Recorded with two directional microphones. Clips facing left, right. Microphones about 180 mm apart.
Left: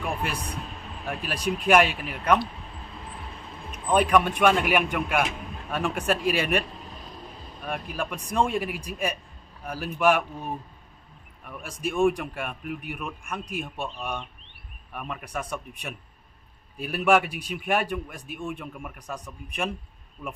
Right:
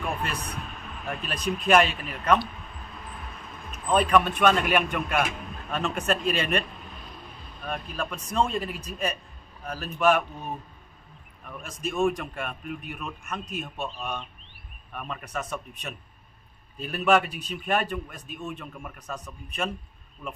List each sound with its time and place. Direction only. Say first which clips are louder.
0.4 s a sound: left 1 dB; 30° left (ahead or behind)
1.0 s a man's voice: left 1 dB; 10° left (ahead or behind)
2.9 s vehicle: left 1 dB; 30° left (ahead or behind)
3.7 s a man's voice: left 1 dB; 10° left (ahead or behind)
6.8 s a sound: left 2 dB; 35° left (ahead or behind)
7.6 s a man's voice: left 1 dB; 10° left (ahead or behind)